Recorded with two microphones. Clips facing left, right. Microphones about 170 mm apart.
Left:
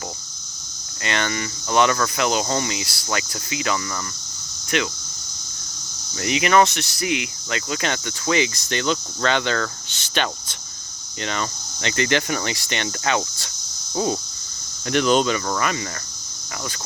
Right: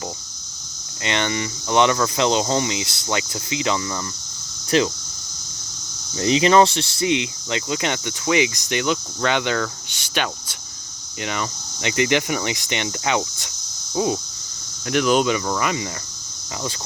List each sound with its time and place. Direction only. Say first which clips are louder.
1.0 s speech: right 2 dB; 20° right (ahead or behind)
4.7 s speech: right 5 dB; 30° right (ahead or behind)
6.1 s cricket: right 3 dB; 30° right (ahead or behind)
13.9 s speech: right 1 dB; 10° right (ahead or behind)
14.8 s cricket: even; 5° right (ahead or behind)